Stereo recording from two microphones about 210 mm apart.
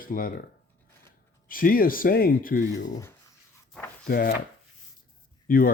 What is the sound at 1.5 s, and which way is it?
Speech, 40° left (ahead or behind).